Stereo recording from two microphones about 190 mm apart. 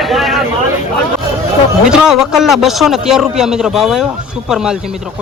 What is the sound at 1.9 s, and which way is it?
A man's voice, 5° right (ahead or behind).